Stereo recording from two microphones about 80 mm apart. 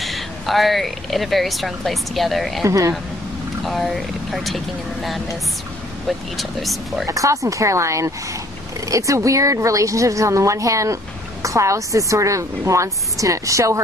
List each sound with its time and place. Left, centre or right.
0.0 s speech: centre
2.6 s a woman's voice: right
3.6 s speech: centre
6.0 s speech: centre
7.1 s a woman's voice: right